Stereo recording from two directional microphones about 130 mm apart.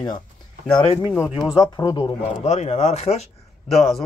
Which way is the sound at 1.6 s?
30° left (ahead or behind).